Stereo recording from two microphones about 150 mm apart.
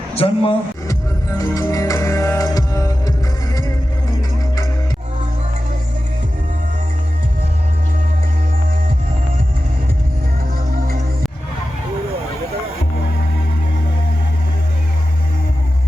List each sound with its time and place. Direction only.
0.2 s speech: 40° left (ahead or behind)
1.4 s music: 20° left (ahead or behind)